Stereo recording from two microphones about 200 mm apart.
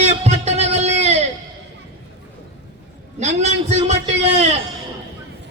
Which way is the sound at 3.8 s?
35° right (ahead or behind).